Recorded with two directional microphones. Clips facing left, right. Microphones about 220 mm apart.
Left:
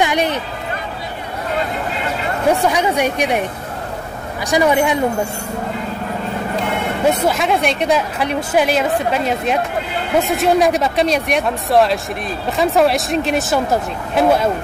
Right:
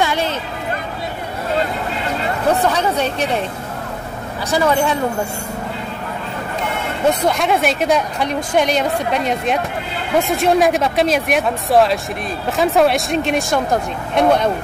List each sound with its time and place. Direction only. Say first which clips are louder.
0.0 s a sound: left 2 dB; 15° left (ahead or behind)
2.5 s speech: left 1 dB; 10° left (ahead or behind)
4.5 s speech: left 2 dB; 15° left (ahead or behind)
7.1 s speech: even; 5° left (ahead or behind)